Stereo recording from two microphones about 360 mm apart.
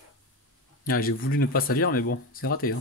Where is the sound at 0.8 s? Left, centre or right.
Left.